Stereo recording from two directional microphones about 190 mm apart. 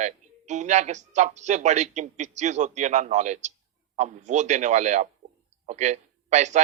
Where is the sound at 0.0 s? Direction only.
40° right (ahead or behind).